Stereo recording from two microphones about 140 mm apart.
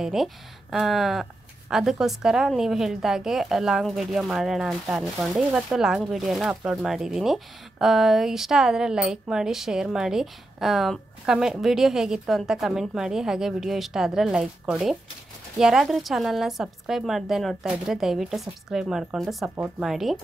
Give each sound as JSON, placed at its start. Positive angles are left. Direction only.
{"t": 0.0, "sound": "a woman's voice", "side_deg": 0}